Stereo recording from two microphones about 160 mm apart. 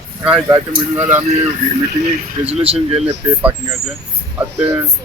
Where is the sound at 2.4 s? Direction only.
40° right (ahead or behind).